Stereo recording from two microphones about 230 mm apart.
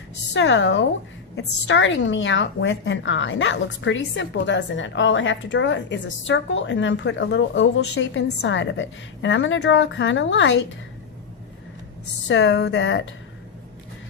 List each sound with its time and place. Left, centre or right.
0.3 s a woman's voice: left
12.3 s a woman's voice: left